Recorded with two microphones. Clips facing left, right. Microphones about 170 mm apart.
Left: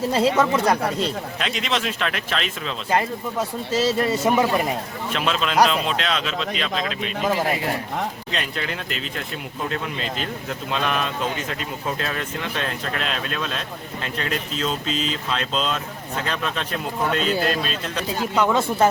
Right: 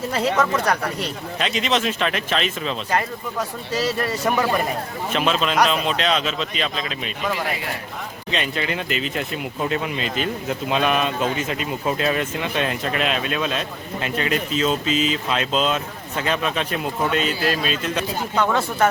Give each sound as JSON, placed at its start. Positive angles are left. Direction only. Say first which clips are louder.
{"t": 0.1, "sound": "speech", "louder": "left 1 dB", "side_deg": 25}
{"t": 1.4, "sound": "speech", "louder": "right 5 dB", "side_deg": 0}
{"t": 2.9, "sound": "speech", "louder": "left 4 dB", "side_deg": 25}
{"t": 5.1, "sound": "speech", "louder": "right 1 dB", "side_deg": 0}
{"t": 7.3, "sound": "speech", "louder": "left 4 dB", "side_deg": 35}
{"t": 8.3, "sound": "speech", "louder": "right 3 dB", "side_deg": 0}